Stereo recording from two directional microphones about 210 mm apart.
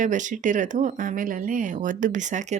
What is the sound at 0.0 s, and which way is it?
Speech, 35° right (ahead or behind).